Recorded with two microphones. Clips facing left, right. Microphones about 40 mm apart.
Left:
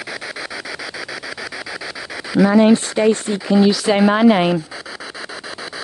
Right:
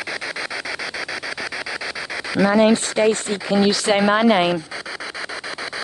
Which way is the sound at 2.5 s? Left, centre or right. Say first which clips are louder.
Left 2 dB; right.